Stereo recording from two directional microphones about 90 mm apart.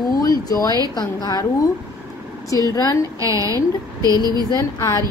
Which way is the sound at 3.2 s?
35° right (ahead or behind).